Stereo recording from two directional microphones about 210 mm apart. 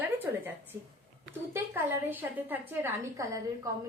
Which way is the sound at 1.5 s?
10° right (ahead or behind).